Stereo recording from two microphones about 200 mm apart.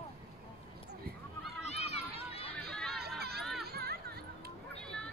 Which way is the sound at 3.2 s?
50° right (ahead or behind).